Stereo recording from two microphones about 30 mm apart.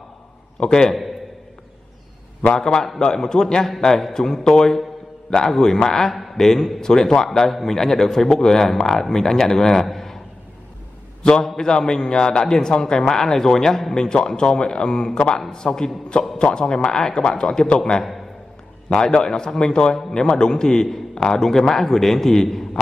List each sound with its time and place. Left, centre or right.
0.7 s a man's voice: left
2.5 s a man's voice: left
9.8 s a sound: centre
11.4 s a man's voice: centre
13.9 s a man's voice: left
19.0 s a man's voice: left